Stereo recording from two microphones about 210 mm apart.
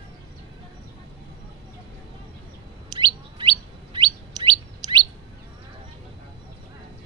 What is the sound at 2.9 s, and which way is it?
Chirp, 20° right (ahead or behind).